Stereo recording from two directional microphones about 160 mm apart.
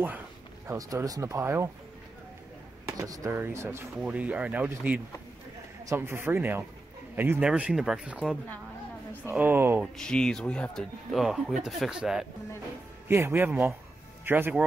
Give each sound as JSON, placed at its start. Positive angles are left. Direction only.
{"t": 0.7, "sound": "speech", "side_deg": -20}
{"t": 2.9, "sound": "speech", "side_deg": -20}
{"t": 9.9, "sound": "speech", "side_deg": 5}
{"t": 13.1, "sound": "speech", "side_deg": -15}